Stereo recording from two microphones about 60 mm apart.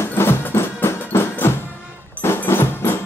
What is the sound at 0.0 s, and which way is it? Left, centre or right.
Music, left.